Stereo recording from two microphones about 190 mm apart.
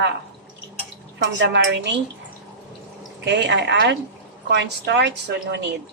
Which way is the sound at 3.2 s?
65° right (ahead or behind).